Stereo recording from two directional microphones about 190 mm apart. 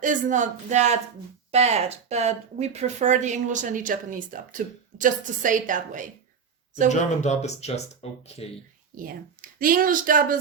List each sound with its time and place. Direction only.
0.0 s speech: 40° right (ahead or behind)
6.8 s speech: 40° left (ahead or behind)
9.0 s speech: 45° right (ahead or behind)